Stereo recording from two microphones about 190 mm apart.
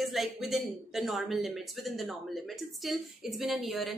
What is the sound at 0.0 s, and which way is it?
Speech, centre (ahead or behind).